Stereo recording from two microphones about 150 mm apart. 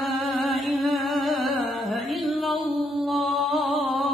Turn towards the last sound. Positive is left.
turn(degrees=0)  # may be behind; listen again after turning